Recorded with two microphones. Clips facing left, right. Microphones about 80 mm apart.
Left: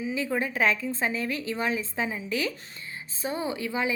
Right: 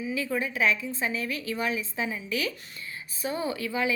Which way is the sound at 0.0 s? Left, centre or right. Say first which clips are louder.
Left 1 dB; left.